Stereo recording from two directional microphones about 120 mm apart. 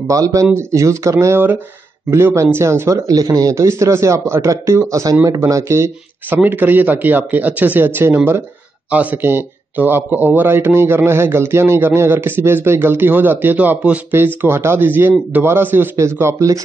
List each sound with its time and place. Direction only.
0.1 s a man's voice: 25° right (ahead or behind)